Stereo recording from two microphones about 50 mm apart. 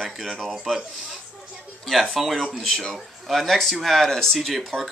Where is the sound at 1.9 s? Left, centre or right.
Centre.